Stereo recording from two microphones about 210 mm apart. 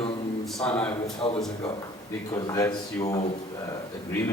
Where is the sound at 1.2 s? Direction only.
25° left (ahead or behind).